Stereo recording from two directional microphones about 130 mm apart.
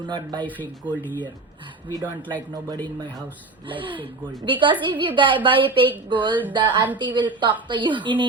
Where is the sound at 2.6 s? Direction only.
35° right (ahead or behind).